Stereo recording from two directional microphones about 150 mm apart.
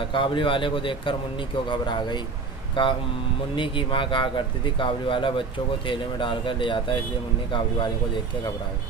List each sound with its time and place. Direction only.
0.1 s speech: 35° left (ahead or behind)